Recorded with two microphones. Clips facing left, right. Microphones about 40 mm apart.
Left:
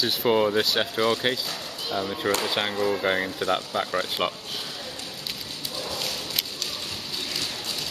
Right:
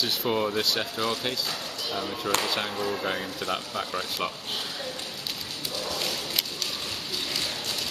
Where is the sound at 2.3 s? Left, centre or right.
Left.